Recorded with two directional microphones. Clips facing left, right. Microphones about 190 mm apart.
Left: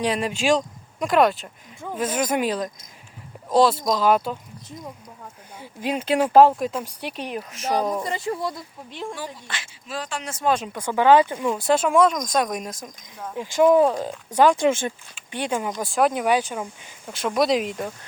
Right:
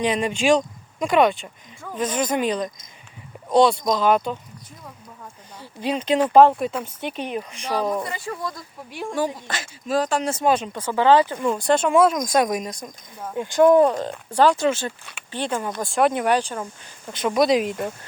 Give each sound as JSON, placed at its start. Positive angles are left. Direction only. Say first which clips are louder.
{"t": 0.0, "sound": "speech", "louder": "right 2 dB", "side_deg": 0}
{"t": 5.5, "sound": "speech", "louder": "right 1 dB", "side_deg": 10}
{"t": 8.0, "sound": "speech", "louder": "left 3 dB", "side_deg": 25}
{"t": 9.1, "sound": "speech", "louder": "right 9 dB", "side_deg": -45}
{"t": 10.5, "sound": "speech", "louder": "right 1 dB", "side_deg": 5}
{"t": 11.4, "sound": "speech", "louder": "right 1 dB", "side_deg": 5}
{"t": 14.3, "sound": "speech", "louder": "left 1 dB", "side_deg": 20}
{"t": 15.8, "sound": "speech", "louder": "right 2 dB", "side_deg": 0}